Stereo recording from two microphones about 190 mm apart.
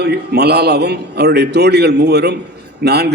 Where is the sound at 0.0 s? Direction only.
60° right (ahead or behind).